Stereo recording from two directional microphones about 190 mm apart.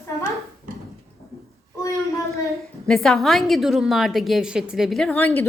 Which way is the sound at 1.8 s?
15° left (ahead or behind).